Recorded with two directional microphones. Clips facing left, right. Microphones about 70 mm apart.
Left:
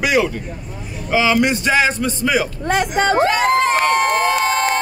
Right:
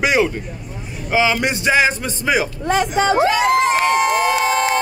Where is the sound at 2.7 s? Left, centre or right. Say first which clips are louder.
Even; left.